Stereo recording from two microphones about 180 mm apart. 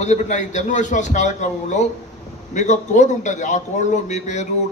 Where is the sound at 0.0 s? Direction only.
40° left (ahead or behind).